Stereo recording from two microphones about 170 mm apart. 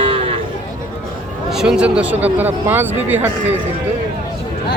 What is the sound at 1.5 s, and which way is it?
Speech, 5° right (ahead or behind).